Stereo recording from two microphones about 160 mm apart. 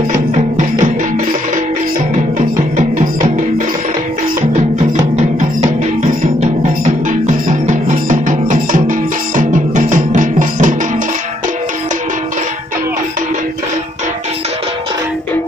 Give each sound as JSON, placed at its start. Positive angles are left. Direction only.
{"t": 0.3, "sound": "music", "side_deg": -50}
{"t": 7.1, "sound": "music", "side_deg": -50}